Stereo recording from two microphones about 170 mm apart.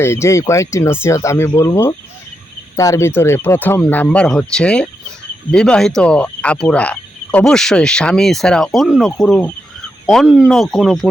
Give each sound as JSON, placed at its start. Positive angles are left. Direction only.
{"t": 0.0, "sound": "speech", "side_deg": 15}
{"t": 5.5, "sound": "fowl", "side_deg": 5}